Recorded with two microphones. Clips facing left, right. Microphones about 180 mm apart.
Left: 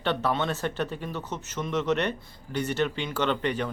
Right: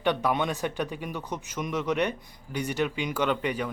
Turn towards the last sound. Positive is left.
turn(degrees=-10)  # may be behind; listen again after turning